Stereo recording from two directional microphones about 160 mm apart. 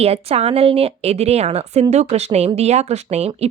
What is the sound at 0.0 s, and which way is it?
Speech, 40° right (ahead or behind).